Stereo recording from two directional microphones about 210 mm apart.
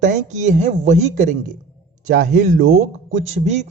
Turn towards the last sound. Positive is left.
turn(degrees=-35)  # may be behind; listen again after turning